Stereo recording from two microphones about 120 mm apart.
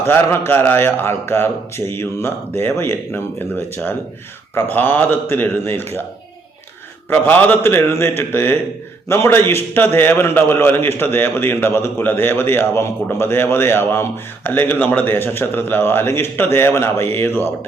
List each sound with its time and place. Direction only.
0.1 s a man's voice: 20° left (ahead or behind)
7.1 s a man's voice: 15° left (ahead or behind)